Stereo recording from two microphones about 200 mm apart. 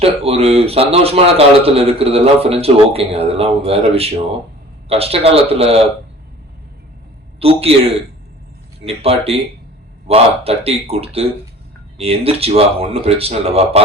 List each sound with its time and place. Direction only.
0.0 s speech: 30° right (ahead or behind)
7.3 s a man's voice: 30° right (ahead or behind)
8.8 s speech: 30° right (ahead or behind)